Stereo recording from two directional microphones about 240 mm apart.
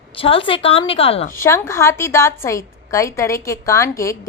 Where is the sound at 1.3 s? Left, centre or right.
Centre.